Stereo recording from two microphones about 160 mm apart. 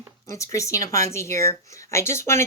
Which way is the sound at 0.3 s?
20° left (ahead or behind).